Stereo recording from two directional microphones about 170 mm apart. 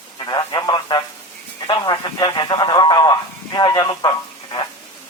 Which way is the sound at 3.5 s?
25° left (ahead or behind).